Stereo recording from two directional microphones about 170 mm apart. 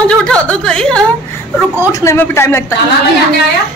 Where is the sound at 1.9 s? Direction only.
15° left (ahead or behind).